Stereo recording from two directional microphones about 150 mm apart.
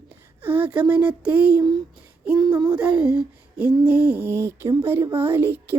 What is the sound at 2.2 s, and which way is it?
Child singing, 10° right (ahead or behind).